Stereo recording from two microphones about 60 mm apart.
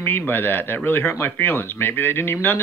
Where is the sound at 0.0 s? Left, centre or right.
Left.